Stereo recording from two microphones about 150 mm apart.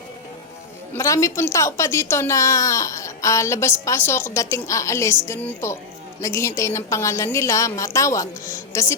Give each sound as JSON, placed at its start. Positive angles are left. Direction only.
{"t": 0.9, "sound": "a woman's voice", "side_deg": 20}